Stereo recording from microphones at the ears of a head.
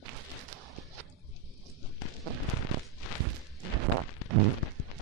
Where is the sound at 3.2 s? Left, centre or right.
Right.